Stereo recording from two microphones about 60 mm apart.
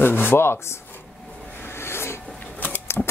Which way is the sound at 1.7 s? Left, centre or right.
Left.